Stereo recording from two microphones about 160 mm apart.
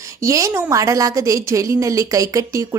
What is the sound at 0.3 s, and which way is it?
A woman's voice, 20° right (ahead or behind).